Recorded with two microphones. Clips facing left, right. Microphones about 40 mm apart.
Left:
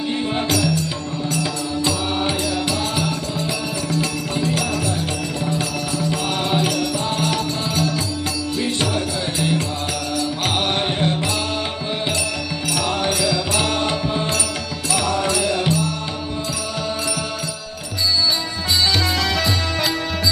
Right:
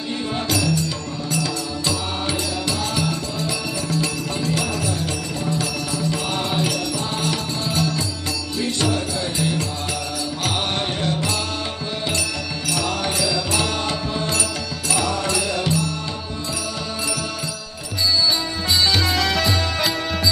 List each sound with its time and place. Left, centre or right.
0.1 s music: left
2.2 s music: centre
6.6 s music: centre; by 11.3 s left
12.7 s music: centre
13.6 s mantra: left
14.9 s music: centre
18.9 s music: centre